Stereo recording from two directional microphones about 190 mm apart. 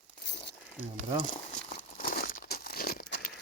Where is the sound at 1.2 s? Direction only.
40° left (ahead or behind).